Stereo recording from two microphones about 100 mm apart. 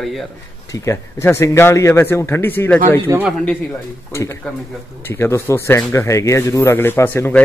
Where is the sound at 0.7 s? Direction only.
30° left (ahead or behind).